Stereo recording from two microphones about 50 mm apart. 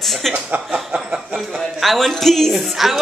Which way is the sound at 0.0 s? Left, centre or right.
Centre.